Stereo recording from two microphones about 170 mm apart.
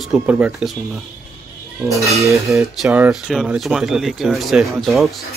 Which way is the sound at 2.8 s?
5° right (ahead or behind).